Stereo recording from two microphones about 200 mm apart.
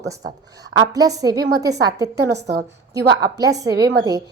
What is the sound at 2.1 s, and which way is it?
Speech, 55° right (ahead or behind).